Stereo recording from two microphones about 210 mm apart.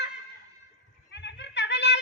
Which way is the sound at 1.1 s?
55° left (ahead or behind).